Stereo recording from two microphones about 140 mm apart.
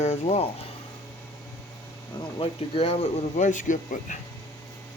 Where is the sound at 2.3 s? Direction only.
40° left (ahead or behind); by 4.1 s 65° left (ahead or behind).